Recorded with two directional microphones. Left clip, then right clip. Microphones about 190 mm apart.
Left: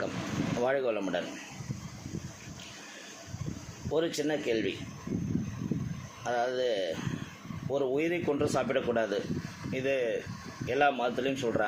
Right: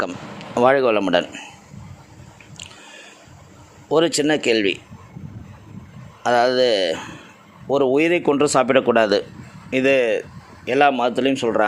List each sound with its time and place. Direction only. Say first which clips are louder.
0.6 s a man's voice: right 15 dB; 55° right (ahead or behind)
3.9 s a man's voice: right 13 dB; 55° right (ahead or behind)
6.2 s a man's voice: right 14 dB; 60° right (ahead or behind)